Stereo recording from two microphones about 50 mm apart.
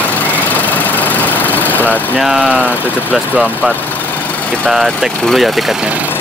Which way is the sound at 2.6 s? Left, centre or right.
Left.